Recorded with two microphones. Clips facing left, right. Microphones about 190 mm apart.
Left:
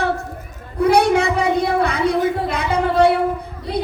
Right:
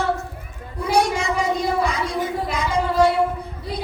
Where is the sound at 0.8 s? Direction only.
65° left (ahead or behind).